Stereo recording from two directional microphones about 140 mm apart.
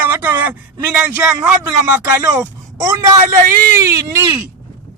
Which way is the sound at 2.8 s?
30° right (ahead or behind).